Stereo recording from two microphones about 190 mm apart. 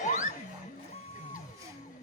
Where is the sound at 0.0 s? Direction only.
40° left (ahead or behind).